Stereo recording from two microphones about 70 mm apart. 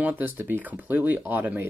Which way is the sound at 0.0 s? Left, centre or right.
Right.